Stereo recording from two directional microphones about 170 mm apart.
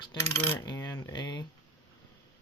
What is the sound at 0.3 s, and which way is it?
Coin, 15° left (ahead or behind).